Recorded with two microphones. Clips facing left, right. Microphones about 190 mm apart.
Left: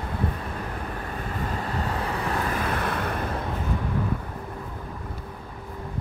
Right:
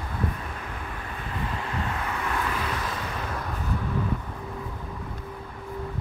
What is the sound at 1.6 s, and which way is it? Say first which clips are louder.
Vehicle: left 2 dB; 35° left (ahead or behind).